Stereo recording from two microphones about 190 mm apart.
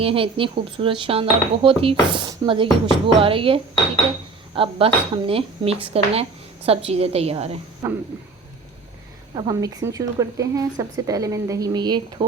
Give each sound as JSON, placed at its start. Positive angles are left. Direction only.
{"t": 0.0, "sound": "a woman's voice", "side_deg": -30}
{"t": 9.3, "sound": "speech", "side_deg": -20}